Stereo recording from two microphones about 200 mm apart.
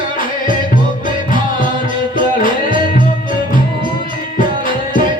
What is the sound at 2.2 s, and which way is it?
Music, 40° left (ahead or behind).